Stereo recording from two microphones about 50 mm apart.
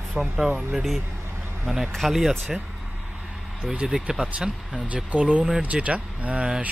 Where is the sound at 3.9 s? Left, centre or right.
Centre.